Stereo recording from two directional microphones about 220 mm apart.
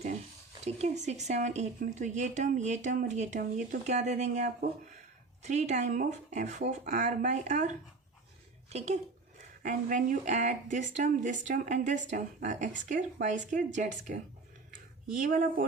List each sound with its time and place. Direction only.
0.6 s speech: 30° right (ahead or behind)